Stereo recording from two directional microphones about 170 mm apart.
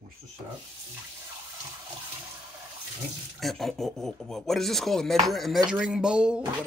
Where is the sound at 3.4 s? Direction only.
Centre (ahead or behind).